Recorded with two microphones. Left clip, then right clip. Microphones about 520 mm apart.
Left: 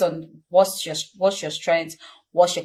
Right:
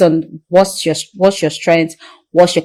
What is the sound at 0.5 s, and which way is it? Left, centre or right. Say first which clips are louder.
Speech: right 7 dB; right.